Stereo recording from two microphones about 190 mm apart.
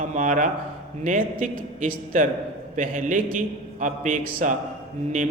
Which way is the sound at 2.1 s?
45° right (ahead or behind).